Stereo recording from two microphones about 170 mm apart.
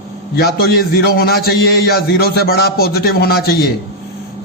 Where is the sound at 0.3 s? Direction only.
70° left (ahead or behind).